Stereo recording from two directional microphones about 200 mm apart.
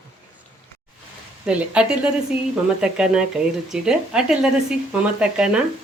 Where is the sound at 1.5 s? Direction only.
5° right (ahead or behind).